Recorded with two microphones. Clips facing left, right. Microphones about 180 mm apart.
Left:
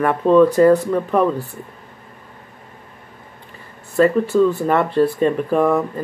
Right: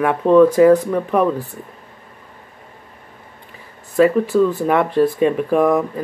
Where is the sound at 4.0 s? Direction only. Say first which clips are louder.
Right 1 dB; 5° right (ahead or behind).